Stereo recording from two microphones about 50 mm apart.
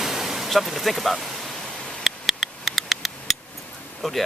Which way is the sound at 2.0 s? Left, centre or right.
Centre.